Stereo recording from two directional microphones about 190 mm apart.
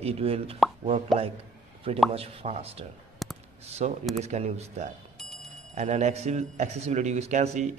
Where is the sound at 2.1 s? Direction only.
30° right (ahead or behind).